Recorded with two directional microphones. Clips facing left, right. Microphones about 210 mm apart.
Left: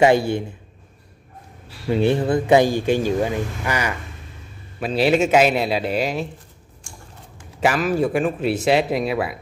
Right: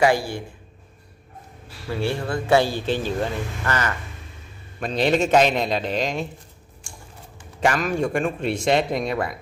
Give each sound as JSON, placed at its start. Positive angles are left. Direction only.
{"t": 0.0, "sound": "a man's voice", "side_deg": 25}
{"t": 1.9, "sound": "speech", "side_deg": 20}
{"t": 7.3, "sound": "a man's voice", "side_deg": 5}